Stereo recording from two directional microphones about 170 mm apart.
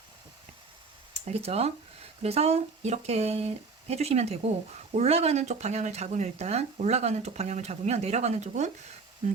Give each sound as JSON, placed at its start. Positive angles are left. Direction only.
{"t": 1.1, "sound": "speech", "side_deg": -40}